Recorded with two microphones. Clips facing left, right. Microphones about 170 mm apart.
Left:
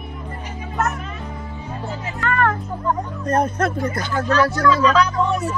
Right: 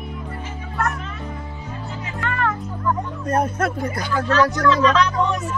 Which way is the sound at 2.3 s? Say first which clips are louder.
Left 5 dB; 55° left (ahead or behind).